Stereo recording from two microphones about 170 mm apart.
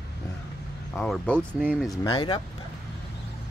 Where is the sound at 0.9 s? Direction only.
Centre (ahead or behind).